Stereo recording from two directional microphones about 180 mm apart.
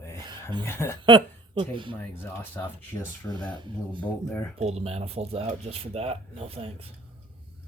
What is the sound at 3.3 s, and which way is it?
Speech, 25° right (ahead or behind).